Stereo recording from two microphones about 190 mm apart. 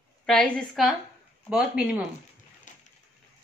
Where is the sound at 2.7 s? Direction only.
40° left (ahead or behind).